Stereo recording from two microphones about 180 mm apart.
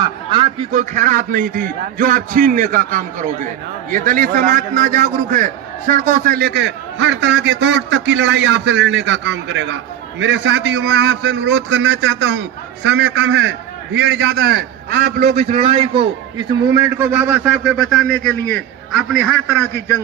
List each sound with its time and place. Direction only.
0.0 s a man's voice: 25° right (ahead or behind)
0.7 s a man's voice: 45° right (ahead or behind); by 15.4 s 65° right (ahead or behind)
15.4 s a man's voice: 35° right (ahead or behind); by 20.0 s 15° left (ahead or behind)